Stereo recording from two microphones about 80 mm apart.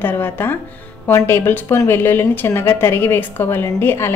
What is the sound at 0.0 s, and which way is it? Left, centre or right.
A woman's voice, left.